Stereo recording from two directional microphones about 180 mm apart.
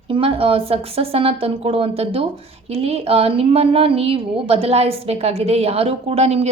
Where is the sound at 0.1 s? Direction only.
30° right (ahead or behind).